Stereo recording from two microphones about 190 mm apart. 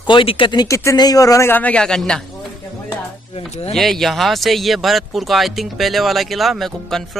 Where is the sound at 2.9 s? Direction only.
30° left (ahead or behind).